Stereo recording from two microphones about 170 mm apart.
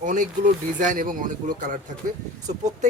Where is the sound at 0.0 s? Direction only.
50° right (ahead or behind).